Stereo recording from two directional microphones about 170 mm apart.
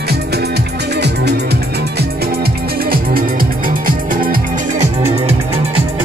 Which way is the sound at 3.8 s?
55° right (ahead or behind).